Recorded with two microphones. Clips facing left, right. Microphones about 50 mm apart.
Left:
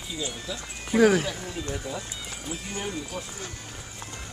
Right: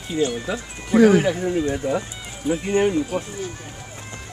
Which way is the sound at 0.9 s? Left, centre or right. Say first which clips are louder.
Right 6 dB; centre.